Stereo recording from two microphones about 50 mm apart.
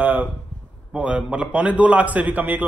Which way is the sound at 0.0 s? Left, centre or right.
Right.